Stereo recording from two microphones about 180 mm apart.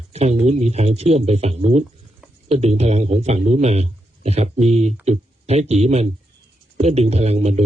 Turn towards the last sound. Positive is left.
turn(degrees=-35)  # may be behind; listen again after turning